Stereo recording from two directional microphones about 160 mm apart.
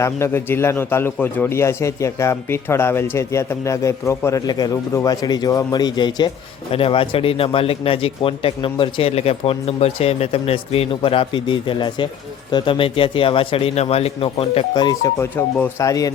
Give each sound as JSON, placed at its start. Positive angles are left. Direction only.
{"t": 0.0, "sound": "a man's voice", "side_deg": 15}